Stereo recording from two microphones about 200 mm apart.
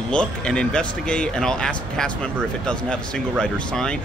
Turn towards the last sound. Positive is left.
turn(degrees=5)  # may be behind; listen again after turning